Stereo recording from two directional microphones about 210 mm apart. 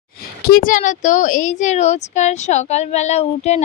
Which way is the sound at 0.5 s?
40° left (ahead or behind).